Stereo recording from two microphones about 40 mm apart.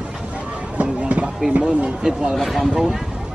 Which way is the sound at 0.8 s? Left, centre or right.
Right.